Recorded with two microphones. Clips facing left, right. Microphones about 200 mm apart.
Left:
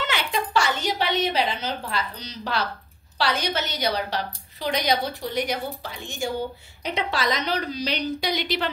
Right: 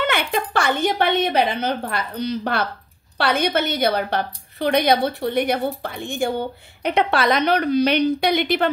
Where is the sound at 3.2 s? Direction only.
55° right (ahead or behind).